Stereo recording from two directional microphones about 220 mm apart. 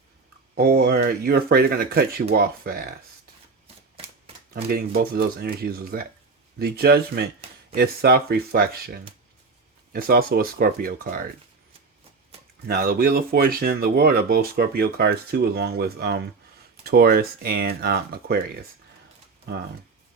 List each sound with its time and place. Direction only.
0.5 s speech: 45° right (ahead or behind)
4.9 s speech: 45° right (ahead or behind)
12.6 s speech: 45° right (ahead or behind)